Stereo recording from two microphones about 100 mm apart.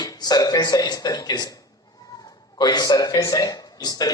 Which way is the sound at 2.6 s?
45° left (ahead or behind).